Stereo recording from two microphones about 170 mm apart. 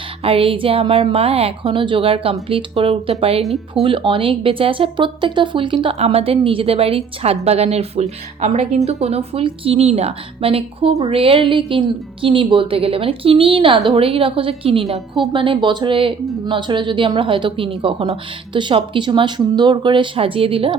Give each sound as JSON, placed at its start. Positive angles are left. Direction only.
{"t": 0.2, "sound": "speech", "side_deg": -35}
{"t": 3.4, "sound": "speech", "side_deg": 0}
{"t": 3.8, "sound": "speech", "side_deg": -30}